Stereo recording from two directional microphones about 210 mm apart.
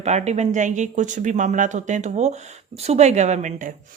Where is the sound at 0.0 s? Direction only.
30° right (ahead or behind).